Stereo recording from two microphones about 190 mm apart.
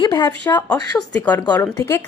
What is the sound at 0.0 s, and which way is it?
Speech, 20° left (ahead or behind).